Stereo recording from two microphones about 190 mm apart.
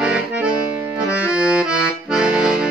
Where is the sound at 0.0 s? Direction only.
5° right (ahead or behind).